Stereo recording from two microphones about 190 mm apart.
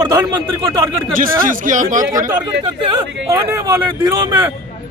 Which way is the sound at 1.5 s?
45° right (ahead or behind).